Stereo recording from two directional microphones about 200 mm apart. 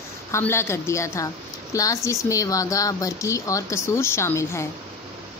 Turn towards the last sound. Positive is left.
turn(degrees=15)  # may be behind; listen again after turning